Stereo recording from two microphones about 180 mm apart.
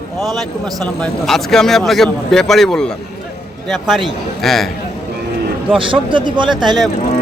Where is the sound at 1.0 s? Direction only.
Centre (ahead or behind).